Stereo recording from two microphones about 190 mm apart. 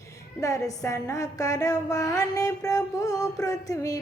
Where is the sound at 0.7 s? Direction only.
15° left (ahead or behind).